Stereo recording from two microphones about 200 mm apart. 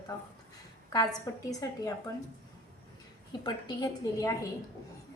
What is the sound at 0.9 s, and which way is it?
A woman's voice, 20° left (ahead or behind).